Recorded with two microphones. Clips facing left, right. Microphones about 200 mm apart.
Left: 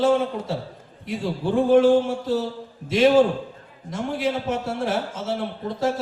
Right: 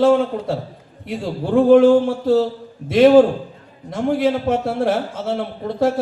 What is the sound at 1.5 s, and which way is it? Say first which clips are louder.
Speech: right 5 dB; 55° right (ahead or behind).